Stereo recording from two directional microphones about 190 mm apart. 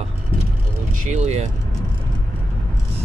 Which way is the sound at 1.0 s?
35° right (ahead or behind).